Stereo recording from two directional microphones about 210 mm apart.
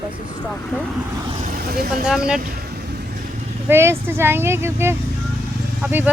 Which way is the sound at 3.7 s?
10° right (ahead or behind).